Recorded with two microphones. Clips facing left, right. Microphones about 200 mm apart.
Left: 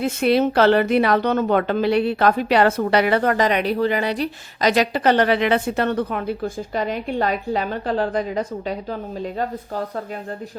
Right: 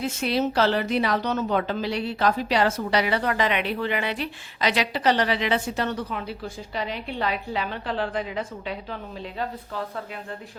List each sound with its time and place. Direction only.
0.0 s a woman's voice: 60° left (ahead or behind)